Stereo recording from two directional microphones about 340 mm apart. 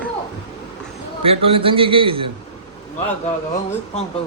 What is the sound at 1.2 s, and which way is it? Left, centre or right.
A man's voice, centre.